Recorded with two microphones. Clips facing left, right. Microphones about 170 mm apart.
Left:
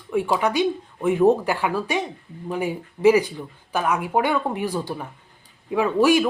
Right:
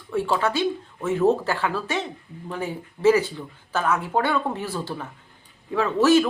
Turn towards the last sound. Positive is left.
turn(degrees=15)  # may be behind; listen again after turning